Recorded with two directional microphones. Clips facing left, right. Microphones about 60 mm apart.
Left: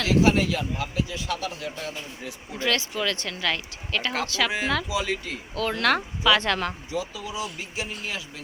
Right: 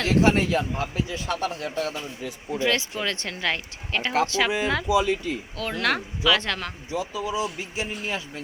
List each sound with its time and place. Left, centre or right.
0.0 s speech: right
2.6 s speech: right
5.5 s speech: centre
6.9 s speech: centre